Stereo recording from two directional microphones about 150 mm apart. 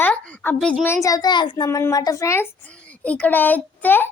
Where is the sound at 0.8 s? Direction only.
20° left (ahead or behind).